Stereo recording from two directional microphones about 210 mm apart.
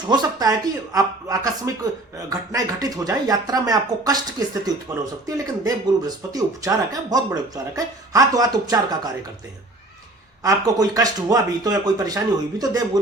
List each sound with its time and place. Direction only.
0.1 s speech: 20° right (ahead or behind)
10.4 s speech: 15° right (ahead or behind)